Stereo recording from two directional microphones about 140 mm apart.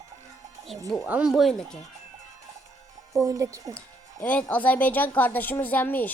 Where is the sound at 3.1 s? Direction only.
20° right (ahead or behind).